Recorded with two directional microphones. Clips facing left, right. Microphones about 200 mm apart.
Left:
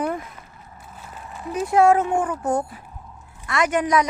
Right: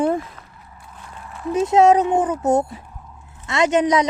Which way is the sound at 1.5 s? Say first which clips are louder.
Right 3 dB; 20° right (ahead or behind).